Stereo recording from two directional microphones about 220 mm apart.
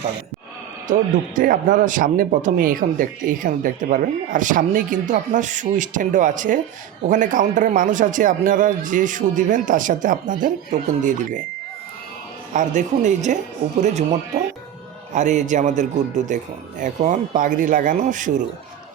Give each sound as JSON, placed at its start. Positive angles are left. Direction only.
{"t": 0.9, "sound": "speech", "side_deg": -35}
{"t": 12.5, "sound": "speech", "side_deg": -35}